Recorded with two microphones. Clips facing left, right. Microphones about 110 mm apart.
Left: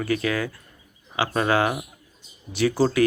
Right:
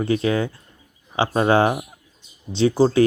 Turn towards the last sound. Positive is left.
turn(degrees=-25)  # may be behind; listen again after turning